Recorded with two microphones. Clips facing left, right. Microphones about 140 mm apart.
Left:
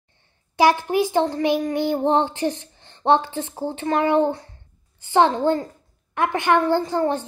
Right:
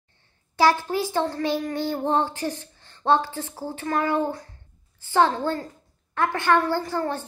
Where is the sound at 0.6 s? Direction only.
15° left (ahead or behind).